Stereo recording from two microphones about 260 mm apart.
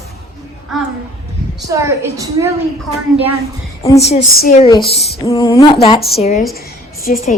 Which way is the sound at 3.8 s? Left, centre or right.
Left.